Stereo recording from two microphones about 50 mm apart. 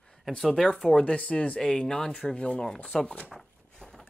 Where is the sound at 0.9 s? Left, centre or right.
Left.